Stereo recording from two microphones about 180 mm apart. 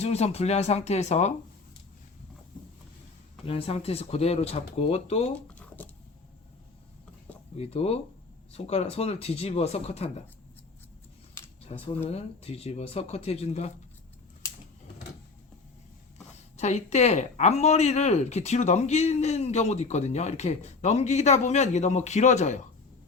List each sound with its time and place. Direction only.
0.0 s speech: 35° left (ahead or behind)
3.4 s speech: 35° left (ahead or behind)
5.3 s a sound: 10° left (ahead or behind)
7.5 s speech: 35° left (ahead or behind)
11.7 s speech: 35° left (ahead or behind)
16.6 s speech: 40° left (ahead or behind)